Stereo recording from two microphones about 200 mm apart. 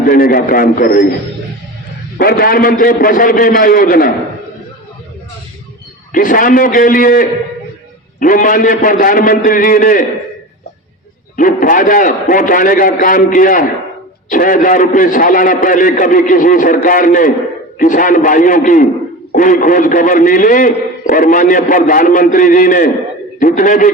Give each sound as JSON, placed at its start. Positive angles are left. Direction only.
{"t": 0.0, "sound": "a man's voice", "side_deg": 45}
{"t": 2.1, "sound": "a man's voice", "side_deg": 50}
{"t": 6.1, "sound": "a man's voice", "side_deg": 40}
{"t": 11.3, "sound": "a man's voice", "side_deg": 45}